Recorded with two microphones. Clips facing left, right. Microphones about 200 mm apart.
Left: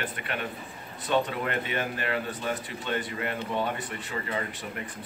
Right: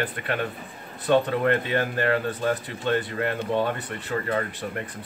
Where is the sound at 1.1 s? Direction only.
55° right (ahead or behind).